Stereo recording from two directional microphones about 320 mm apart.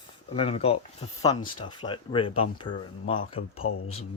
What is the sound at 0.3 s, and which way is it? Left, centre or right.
Speech, centre.